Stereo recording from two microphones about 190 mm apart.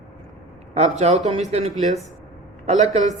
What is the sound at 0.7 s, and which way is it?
Speech, 35° right (ahead or behind).